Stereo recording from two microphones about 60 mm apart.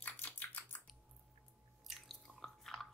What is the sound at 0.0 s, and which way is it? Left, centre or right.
Typing, left.